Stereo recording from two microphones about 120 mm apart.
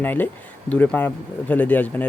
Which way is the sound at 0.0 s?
15° left (ahead or behind).